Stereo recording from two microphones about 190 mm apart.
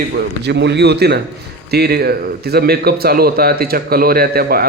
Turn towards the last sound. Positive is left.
turn(degrees=-55)  # may be behind; listen again after turning